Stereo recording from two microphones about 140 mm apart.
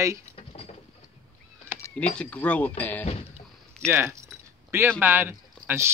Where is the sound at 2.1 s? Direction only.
10° left (ahead or behind).